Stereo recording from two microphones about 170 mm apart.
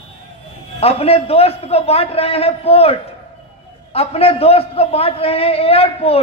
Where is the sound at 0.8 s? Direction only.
35° left (ahead or behind).